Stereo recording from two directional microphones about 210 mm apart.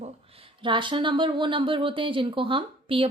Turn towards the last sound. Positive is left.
turn(degrees=-25)  # may be behind; listen again after turning